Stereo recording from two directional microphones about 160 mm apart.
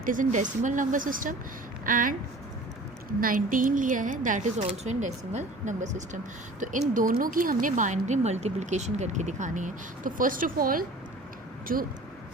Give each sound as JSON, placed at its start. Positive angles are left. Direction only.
{"t": 0.0, "sound": "speech", "side_deg": -55}
{"t": 3.2, "sound": "speech", "side_deg": -60}